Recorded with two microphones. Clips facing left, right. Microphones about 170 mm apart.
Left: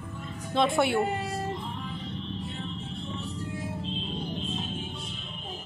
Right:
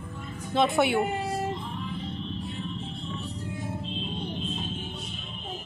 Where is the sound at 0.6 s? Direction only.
Centre (ahead or behind).